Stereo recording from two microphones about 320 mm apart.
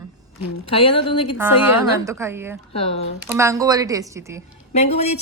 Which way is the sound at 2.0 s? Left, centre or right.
Centre.